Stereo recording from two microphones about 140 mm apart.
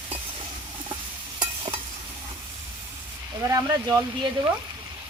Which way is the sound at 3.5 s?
25° right (ahead or behind).